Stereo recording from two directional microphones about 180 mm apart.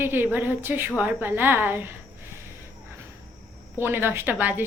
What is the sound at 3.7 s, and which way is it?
Speech, 10° right (ahead or behind).